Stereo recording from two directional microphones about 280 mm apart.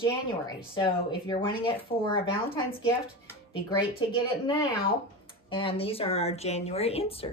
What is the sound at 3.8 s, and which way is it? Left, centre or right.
Speech, centre.